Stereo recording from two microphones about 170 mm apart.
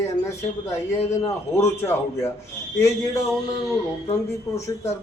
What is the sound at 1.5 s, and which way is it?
Speech, 15° left (ahead or behind).